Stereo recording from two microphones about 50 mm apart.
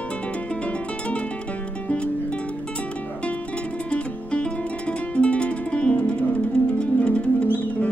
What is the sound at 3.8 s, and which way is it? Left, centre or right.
Music, left.